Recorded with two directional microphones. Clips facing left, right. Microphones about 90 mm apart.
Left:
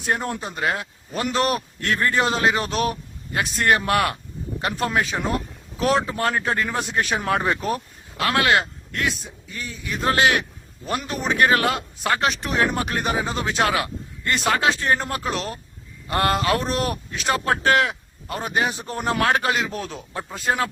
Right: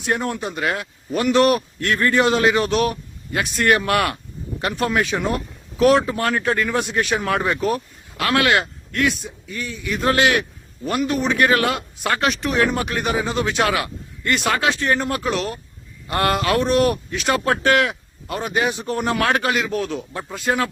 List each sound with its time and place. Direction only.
0.0 s a man's voice: 30° left (ahead or behind)